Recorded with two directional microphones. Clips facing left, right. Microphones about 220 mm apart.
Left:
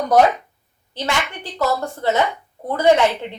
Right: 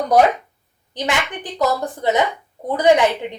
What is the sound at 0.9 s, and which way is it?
A woman's voice, 15° right (ahead or behind).